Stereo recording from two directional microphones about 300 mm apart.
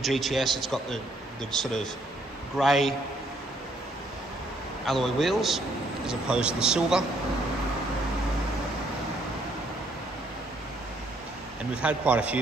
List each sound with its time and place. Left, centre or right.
0.0 s a man's voice: centre
4.8 s a man's voice: centre
11.7 s a man's voice: centre